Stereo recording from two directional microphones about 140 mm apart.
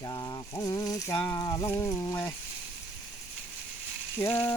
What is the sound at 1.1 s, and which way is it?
Frying, 25° left (ahead or behind).